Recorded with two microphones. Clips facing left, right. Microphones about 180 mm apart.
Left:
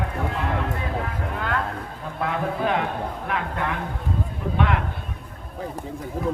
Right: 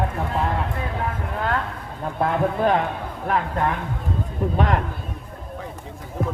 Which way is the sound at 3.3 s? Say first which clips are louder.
Right 7 dB; 40° right (ahead or behind).